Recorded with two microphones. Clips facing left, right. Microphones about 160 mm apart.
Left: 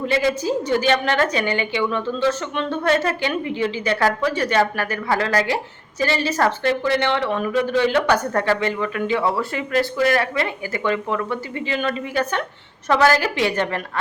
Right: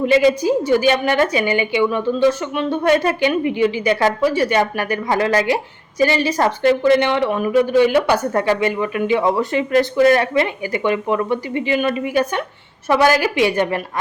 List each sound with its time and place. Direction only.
0.0 s speech: 15° right (ahead or behind)